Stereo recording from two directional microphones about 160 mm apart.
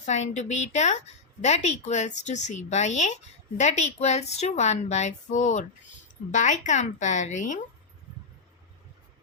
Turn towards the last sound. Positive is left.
turn(degrees=50)  # may be behind; listen again after turning